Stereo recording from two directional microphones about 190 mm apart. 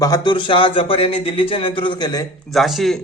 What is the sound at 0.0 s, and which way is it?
A man's voice, 20° left (ahead or behind).